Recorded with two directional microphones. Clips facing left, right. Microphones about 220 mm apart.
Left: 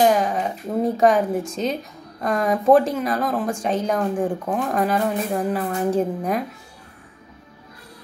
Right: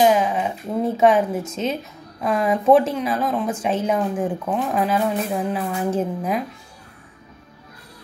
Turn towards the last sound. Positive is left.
turn(degrees=0)  # may be behind; listen again after turning